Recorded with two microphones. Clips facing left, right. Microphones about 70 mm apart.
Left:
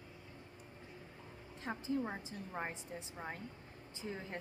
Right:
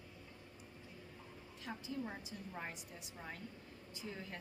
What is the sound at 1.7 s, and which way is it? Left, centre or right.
A woman's voice, left.